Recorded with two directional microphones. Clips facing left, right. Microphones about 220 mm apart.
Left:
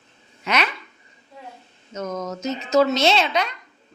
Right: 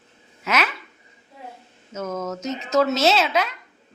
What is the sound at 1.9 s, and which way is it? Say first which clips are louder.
Speech: even; 5° right (ahead or behind).